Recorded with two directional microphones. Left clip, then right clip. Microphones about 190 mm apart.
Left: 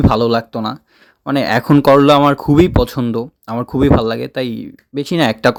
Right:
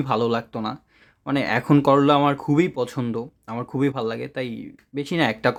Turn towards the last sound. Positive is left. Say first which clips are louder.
# left 7 dB
turn(degrees=35)  # may be behind; listen again after turning